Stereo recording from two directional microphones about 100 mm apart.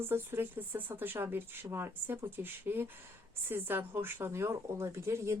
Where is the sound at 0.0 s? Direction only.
25° right (ahead or behind).